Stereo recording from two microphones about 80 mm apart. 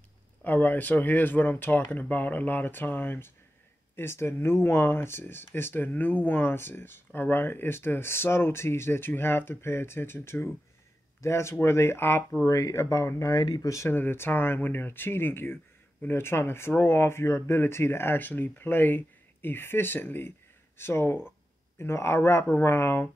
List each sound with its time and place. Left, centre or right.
0.4 s speech: left
12.4 s speech: left
13.8 s speech: left